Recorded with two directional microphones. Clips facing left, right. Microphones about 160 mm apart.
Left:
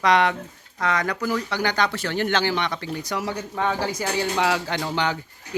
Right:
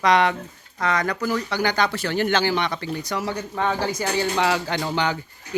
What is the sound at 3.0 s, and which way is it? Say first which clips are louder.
Speech: right 1 dB; 10° left (ahead or behind).